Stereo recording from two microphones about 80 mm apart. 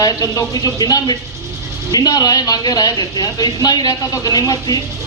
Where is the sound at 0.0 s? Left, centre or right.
Left.